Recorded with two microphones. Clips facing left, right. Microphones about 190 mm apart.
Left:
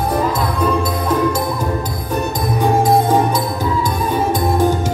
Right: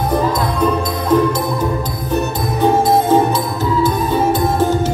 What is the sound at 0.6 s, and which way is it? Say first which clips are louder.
Music: even; 10° left (ahead or behind).